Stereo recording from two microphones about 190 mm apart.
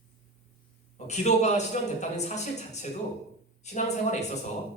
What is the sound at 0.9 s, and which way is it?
A man's voice, 35° left (ahead or behind).